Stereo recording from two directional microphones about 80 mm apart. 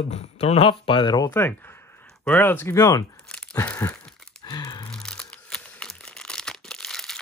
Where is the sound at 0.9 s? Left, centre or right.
Left.